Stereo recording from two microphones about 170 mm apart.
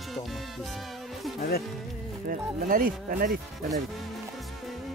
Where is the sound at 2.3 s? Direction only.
55° right (ahead or behind).